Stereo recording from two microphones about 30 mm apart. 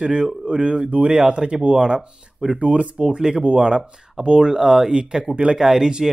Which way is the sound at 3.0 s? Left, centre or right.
Right.